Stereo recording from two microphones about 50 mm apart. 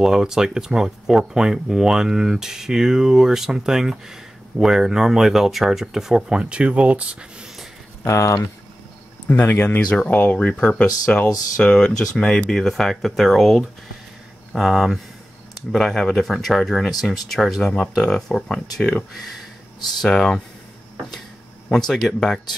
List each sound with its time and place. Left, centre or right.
0.0 s speech: centre
8.0 s speech: left
9.3 s speech: left
9.8 s speech: centre
11.5 s speech: centre
12.4 s speech: centre
20.1 s speech: centre
21.7 s speech: centre